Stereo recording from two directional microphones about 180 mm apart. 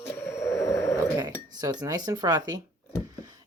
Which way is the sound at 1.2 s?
20° right (ahead or behind).